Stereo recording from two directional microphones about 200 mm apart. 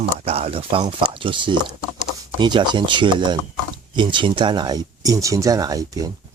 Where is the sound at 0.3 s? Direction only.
30° right (ahead or behind).